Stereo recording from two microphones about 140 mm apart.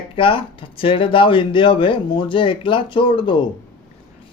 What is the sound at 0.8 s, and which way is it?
Speech, 40° left (ahead or behind).